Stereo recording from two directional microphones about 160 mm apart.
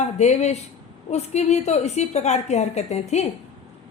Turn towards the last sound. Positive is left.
turn(degrees=45)  # may be behind; listen again after turning